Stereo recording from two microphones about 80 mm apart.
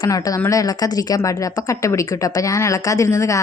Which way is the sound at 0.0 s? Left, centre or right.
Left.